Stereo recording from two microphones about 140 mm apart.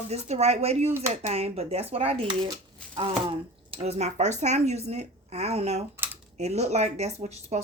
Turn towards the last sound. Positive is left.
turn(degrees=-50)  # may be behind; listen again after turning